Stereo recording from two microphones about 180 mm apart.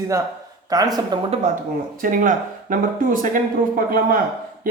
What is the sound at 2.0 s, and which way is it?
Speech, 50° right (ahead or behind).